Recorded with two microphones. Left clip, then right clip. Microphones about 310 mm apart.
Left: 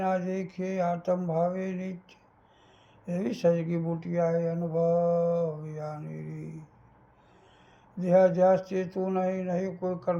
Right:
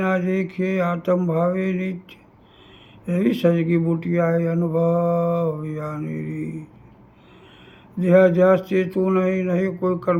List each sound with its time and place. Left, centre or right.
0.0 s speech: centre
7.9 s speech: centre